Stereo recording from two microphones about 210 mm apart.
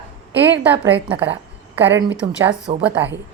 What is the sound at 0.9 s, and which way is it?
Speech, 55° right (ahead or behind).